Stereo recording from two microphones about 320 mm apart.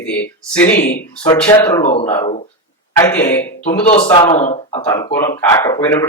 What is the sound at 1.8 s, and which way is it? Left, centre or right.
Speech, left.